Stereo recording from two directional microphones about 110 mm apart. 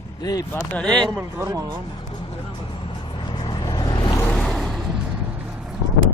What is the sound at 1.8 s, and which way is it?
Vehicle, 45° left (ahead or behind).